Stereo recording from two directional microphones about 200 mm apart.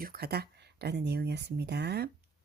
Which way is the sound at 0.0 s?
50° right (ahead or behind).